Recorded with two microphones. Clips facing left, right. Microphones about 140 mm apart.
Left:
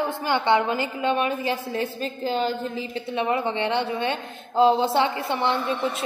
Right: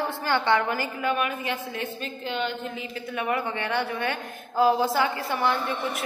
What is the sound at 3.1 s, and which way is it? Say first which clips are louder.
A woman's voice: left 4 dB; 25° left (ahead or behind).